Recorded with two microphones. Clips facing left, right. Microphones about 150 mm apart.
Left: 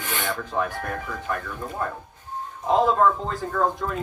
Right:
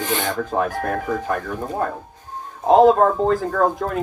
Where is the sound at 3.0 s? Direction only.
45° right (ahead or behind).